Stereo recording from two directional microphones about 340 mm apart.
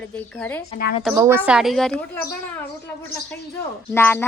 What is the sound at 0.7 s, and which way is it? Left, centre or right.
Speech, left.